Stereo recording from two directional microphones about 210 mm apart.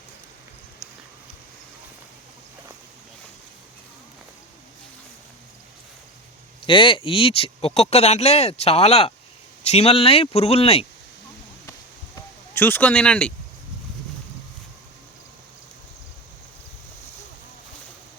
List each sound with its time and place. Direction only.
6.7 s speech: 25° left (ahead or behind)
12.5 s speech: 10° left (ahead or behind)